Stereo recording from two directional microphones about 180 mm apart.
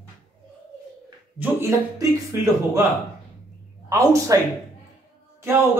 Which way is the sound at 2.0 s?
15° right (ahead or behind).